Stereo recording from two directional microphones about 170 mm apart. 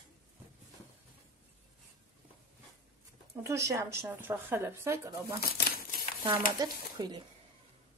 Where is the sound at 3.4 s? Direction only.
15° right (ahead or behind).